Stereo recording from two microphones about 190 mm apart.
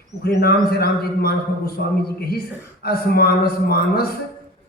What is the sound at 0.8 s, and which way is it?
A man's voice, 55° left (ahead or behind).